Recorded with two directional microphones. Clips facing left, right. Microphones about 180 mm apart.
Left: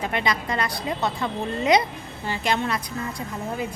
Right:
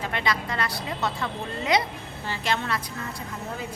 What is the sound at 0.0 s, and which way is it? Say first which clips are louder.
A woman's voice: left 3 dB; 15° left (ahead or behind).